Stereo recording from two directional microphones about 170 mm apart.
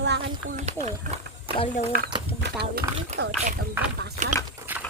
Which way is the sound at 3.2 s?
75° right (ahead or behind).